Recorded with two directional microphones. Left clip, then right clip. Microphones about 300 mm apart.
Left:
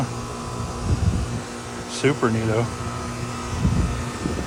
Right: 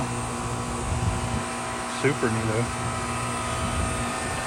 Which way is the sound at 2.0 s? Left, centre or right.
Centre.